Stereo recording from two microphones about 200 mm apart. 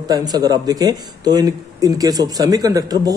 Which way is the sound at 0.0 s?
20° right (ahead or behind).